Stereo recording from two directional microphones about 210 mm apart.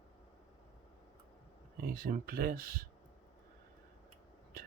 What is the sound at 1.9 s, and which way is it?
Speech, 45° right (ahead or behind).